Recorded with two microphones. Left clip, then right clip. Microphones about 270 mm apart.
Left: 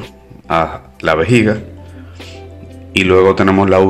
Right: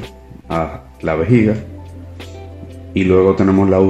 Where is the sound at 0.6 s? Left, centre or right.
Left.